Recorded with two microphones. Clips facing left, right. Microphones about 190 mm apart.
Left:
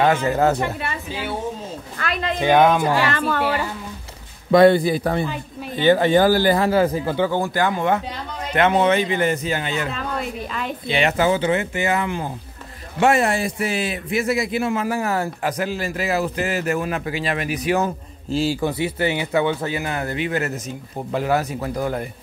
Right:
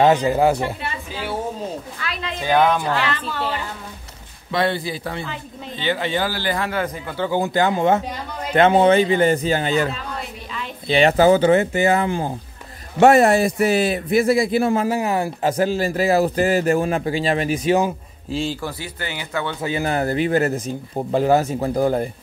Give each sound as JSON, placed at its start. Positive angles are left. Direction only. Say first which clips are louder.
{"t": 0.0, "sound": "speech", "louder": "right 2 dB", "side_deg": -15}
{"t": 2.0, "sound": "speech", "louder": "left 5 dB", "side_deg": 50}
{"t": 2.4, "sound": "a woman's voice", "louder": "left 2 dB", "side_deg": 15}
{"t": 3.0, "sound": "speech", "louder": "left 4 dB", "side_deg": 50}
{"t": 4.5, "sound": "speech", "louder": "left 9 dB", "side_deg": 45}
{"t": 7.3, "sound": "a man's voice", "louder": "right 2 dB", "side_deg": -20}
{"t": 10.9, "sound": "speech", "louder": "right 5 dB", "side_deg": -35}
{"t": 15.0, "sound": "speech", "louder": "right 2 dB", "side_deg": -15}
{"t": 15.5, "sound": "a man's voice", "louder": "right 5 dB", "side_deg": -30}
{"t": 18.3, "sound": "a man's voice", "louder": "left 3 dB", "side_deg": 5}
{"t": 18.6, "sound": "speech", "louder": "left 8 dB", "side_deg": 25}
{"t": 19.7, "sound": "speech", "louder": "right 4 dB", "side_deg": -35}